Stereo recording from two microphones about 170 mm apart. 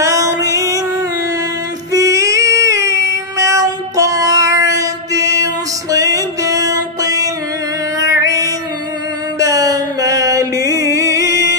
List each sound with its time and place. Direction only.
0.0 s music: 20° right (ahead or behind)
1.9 s child singing: 20° right (ahead or behind)
8.0 s music: 20° right (ahead or behind)